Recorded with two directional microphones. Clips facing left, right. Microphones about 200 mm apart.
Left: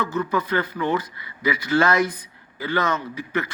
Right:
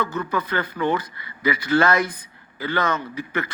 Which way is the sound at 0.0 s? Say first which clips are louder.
Left 1 dB; 55° right (ahead or behind).